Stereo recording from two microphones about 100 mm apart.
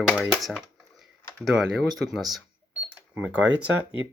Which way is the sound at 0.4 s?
Centre (ahead or behind).